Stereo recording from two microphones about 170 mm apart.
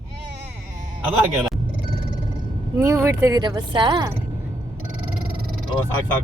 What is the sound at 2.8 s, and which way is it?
Speech, 15° right (ahead or behind).